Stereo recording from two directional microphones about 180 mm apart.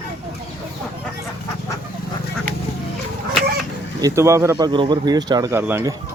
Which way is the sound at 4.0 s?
15° right (ahead or behind).